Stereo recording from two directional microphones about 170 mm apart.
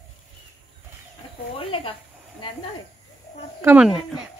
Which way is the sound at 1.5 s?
30° left (ahead or behind).